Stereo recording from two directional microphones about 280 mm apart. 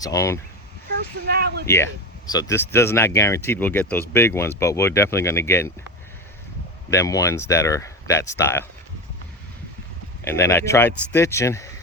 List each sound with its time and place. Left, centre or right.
0.0 s speech: centre
0.9 s speech: right
1.6 s speech: centre
6.9 s speech: centre
10.2 s speech: centre